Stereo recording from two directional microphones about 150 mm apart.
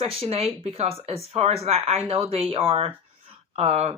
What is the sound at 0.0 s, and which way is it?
Speech, 40° right (ahead or behind).